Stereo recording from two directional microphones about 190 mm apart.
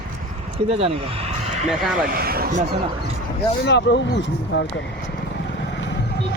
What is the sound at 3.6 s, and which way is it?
Speech, 65° left (ahead or behind).